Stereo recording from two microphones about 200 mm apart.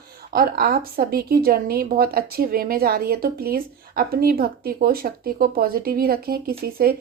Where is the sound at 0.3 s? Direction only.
50° right (ahead or behind).